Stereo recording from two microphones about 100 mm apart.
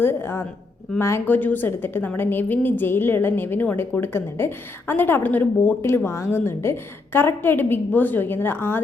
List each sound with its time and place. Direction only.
0.0 s a woman's voice: 25° left (ahead or behind)